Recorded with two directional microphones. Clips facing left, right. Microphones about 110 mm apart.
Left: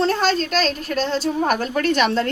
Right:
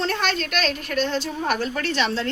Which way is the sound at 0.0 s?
35° left (ahead or behind).